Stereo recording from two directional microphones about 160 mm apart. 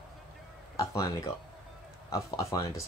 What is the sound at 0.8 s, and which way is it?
Speech, 20° left (ahead or behind).